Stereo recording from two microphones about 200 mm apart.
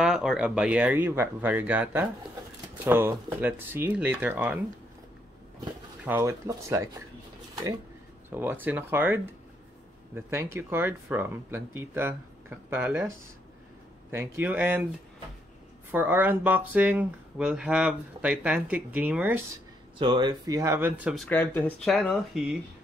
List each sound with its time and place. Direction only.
0.0 s speech: centre (ahead or behind)
6.0 s speech: 10° right (ahead or behind)
8.3 s speech: 10° right (ahead or behind)
15.9 s speech: 10° right (ahead or behind)
20.0 s speech: 25° right (ahead or behind); by 21.3 s 5° right (ahead or behind)
21.3 s speech: 10° left (ahead or behind)